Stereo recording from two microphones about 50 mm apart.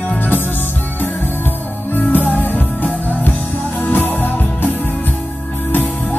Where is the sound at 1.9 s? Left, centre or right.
Left.